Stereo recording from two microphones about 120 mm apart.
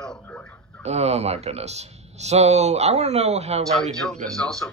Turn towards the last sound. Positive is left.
turn(degrees=5)  # may be behind; listen again after turning